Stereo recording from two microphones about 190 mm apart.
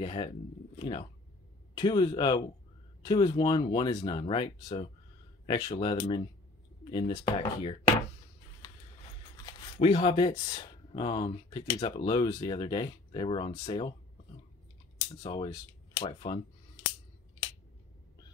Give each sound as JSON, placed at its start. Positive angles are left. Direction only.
{"t": 0.0, "sound": "speech", "side_deg": 25}
{"t": 9.5, "sound": "speech", "side_deg": 25}
{"t": 15.1, "sound": "speech", "side_deg": 25}